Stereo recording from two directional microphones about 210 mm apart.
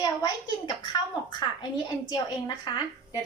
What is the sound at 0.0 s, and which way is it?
Speech, 20° left (ahead or behind).